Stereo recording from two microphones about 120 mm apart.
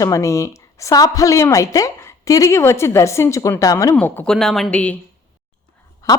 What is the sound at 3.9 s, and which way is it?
Speech, 10° left (ahead or behind).